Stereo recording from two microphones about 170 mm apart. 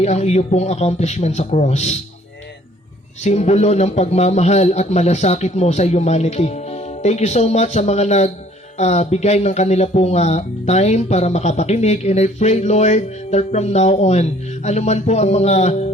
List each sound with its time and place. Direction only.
0.0 s speech: 40° left (ahead or behind)
3.2 s speech: 40° left (ahead or behind)